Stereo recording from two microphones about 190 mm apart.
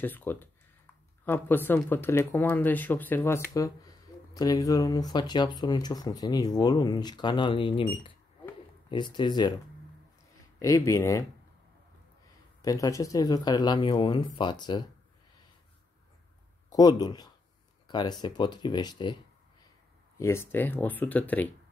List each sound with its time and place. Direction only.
0.0 s speech: 10° left (ahead or behind)
10.6 s speech: 15° left (ahead or behind)
12.6 s speech: 15° left (ahead or behind)
16.7 s speech: 20° left (ahead or behind)
20.2 s speech: 15° left (ahead or behind)